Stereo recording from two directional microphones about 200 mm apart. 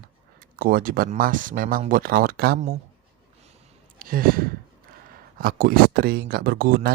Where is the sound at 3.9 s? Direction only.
45° right (ahead or behind).